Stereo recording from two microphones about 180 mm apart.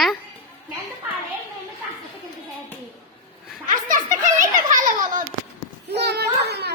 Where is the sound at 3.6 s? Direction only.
45° right (ahead or behind).